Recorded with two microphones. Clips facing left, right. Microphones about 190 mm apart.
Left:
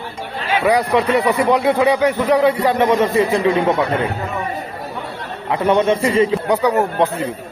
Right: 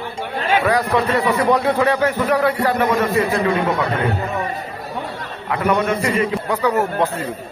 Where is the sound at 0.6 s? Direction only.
15° left (ahead or behind).